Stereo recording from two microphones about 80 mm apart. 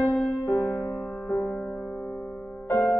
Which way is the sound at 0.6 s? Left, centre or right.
Left.